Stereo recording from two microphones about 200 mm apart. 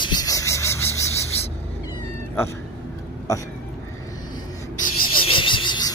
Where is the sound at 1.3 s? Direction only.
30° left (ahead or behind).